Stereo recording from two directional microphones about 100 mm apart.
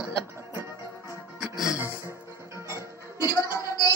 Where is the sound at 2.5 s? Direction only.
30° right (ahead or behind).